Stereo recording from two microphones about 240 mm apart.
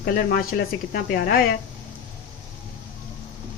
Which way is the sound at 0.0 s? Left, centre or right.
Left.